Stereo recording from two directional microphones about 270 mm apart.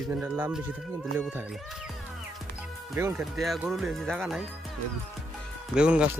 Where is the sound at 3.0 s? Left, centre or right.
Centre.